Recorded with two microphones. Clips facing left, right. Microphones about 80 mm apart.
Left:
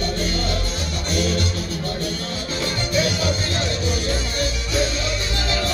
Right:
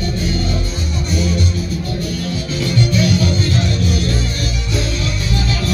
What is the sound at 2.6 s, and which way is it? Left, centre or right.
Music, left.